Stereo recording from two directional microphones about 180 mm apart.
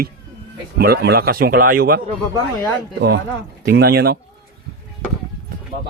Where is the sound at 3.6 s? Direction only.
65° right (ahead or behind).